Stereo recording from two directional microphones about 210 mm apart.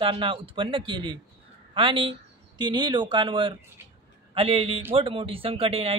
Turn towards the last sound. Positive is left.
turn(degrees=-25)  # may be behind; listen again after turning